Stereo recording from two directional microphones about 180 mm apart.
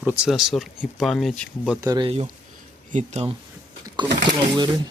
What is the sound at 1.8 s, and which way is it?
Speech, 20° right (ahead or behind).